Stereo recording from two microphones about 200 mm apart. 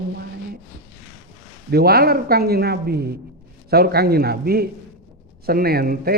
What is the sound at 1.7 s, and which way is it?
A man's voice, 50° right (ahead or behind).